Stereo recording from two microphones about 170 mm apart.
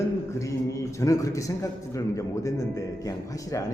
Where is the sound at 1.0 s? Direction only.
20° left (ahead or behind).